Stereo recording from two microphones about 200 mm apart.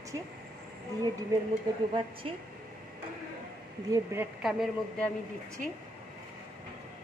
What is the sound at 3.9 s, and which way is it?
Speech, 15° right (ahead or behind).